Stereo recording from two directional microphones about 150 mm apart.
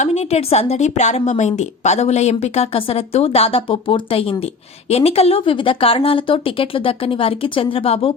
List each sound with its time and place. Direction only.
0.0 s a woman's voice: 45° left (ahead or behind)